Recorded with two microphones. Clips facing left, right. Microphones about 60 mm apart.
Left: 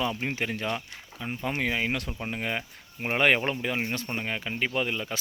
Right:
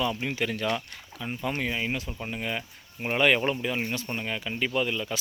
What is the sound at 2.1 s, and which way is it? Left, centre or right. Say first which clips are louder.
Speech: left 1 dB; left.